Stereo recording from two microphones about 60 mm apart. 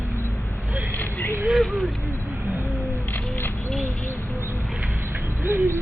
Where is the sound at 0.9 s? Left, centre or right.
Left.